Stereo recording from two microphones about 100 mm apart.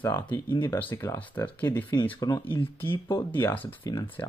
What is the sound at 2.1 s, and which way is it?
Speech, 50° left (ahead or behind).